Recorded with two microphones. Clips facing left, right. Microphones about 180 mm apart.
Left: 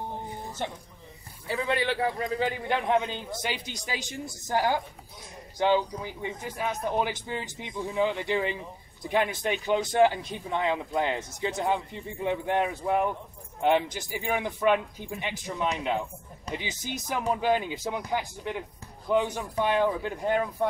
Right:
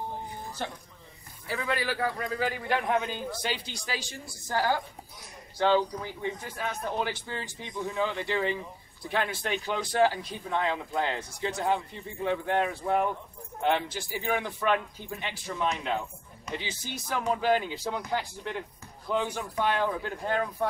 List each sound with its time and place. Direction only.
0.6 s a man's voice: 20° left (ahead or behind)